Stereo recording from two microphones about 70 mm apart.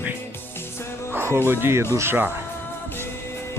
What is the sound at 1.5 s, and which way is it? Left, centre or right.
Speech, right.